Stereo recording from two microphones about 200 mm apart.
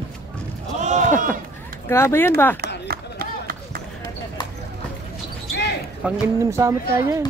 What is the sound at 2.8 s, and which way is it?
Run, 50° right (ahead or behind).